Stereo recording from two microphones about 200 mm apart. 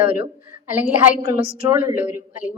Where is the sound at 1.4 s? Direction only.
25° right (ahead or behind).